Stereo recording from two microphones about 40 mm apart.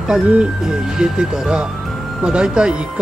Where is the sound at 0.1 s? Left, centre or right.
Centre.